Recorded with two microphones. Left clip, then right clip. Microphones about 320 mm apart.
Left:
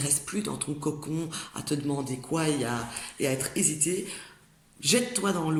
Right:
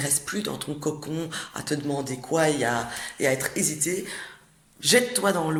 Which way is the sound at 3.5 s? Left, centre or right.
Right.